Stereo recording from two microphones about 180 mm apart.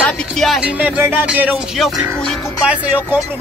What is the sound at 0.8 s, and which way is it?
Music, 10° right (ahead or behind).